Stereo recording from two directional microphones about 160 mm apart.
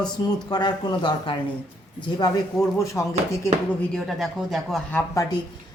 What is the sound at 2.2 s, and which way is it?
Speech, 20° left (ahead or behind).